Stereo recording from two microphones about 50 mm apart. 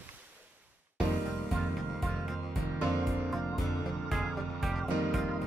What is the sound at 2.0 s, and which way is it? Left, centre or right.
Music, centre.